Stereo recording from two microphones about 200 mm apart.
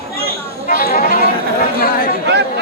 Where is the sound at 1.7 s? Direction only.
45° left (ahead or behind).